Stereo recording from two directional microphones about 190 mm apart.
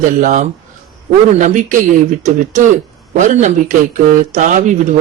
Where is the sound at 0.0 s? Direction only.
45° right (ahead or behind).